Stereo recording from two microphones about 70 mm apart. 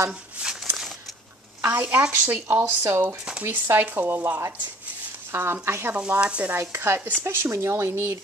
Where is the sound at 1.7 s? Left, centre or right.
Right.